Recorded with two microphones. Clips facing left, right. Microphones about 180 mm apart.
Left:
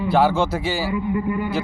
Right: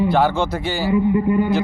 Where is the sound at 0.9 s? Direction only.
25° right (ahead or behind).